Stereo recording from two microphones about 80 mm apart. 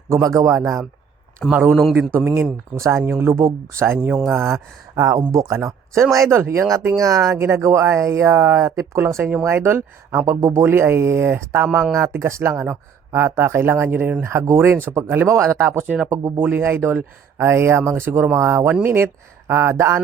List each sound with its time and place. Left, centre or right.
0.1 s a man's voice: right
1.7 s a man's voice: centre
2.1 s speech: right
4.0 s speech: centre
4.3 s speech: right
6.7 s speech: right
16.4 s speech: right